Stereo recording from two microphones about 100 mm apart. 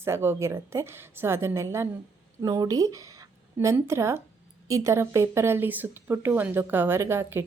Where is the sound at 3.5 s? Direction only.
25° right (ahead or behind).